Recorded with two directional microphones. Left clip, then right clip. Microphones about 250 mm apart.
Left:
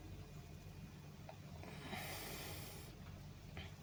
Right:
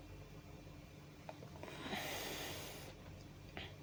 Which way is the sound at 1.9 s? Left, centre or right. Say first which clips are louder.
Right 5 dB; centre.